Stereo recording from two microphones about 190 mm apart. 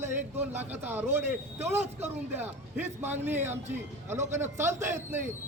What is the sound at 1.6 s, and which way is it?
Speech, 35° right (ahead or behind).